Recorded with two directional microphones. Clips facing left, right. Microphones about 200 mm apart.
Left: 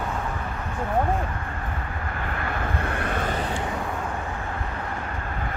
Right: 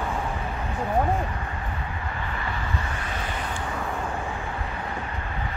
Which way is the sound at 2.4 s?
55° left (ahead or behind).